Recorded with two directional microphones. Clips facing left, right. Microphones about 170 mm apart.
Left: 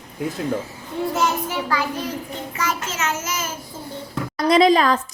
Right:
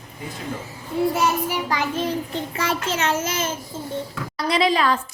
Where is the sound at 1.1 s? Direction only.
10° right (ahead or behind).